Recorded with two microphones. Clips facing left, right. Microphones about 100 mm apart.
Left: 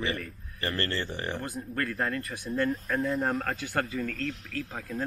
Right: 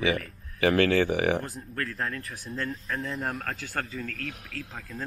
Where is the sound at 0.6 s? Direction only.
65° right (ahead or behind).